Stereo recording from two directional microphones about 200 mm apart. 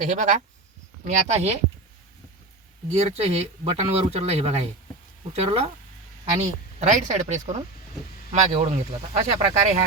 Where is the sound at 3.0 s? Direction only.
30° right (ahead or behind).